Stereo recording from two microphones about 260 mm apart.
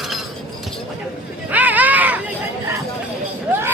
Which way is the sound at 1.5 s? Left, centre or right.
Centre.